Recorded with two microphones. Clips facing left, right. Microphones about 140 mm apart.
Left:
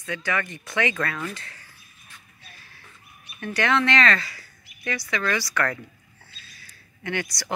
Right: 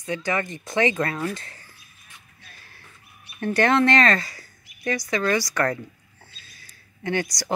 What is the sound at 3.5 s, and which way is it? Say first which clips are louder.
A woman's voice: right 4 dB; 45° right (ahead or behind).